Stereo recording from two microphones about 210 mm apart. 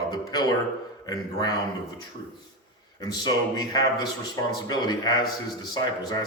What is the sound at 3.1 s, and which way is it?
Speech, 20° left (ahead or behind).